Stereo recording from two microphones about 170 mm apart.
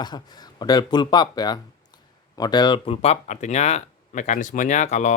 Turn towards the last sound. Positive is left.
turn(degrees=45)  # may be behind; listen again after turning